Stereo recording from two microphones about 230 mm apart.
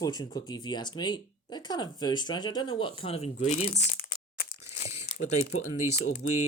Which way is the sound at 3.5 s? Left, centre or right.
Left.